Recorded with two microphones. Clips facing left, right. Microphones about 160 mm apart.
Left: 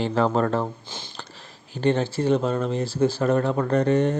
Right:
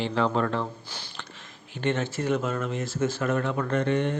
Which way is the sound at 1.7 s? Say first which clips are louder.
Left 5 dB; 35° left (ahead or behind).